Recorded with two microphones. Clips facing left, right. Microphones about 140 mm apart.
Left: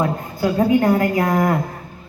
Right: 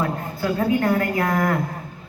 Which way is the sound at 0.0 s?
15° left (ahead or behind).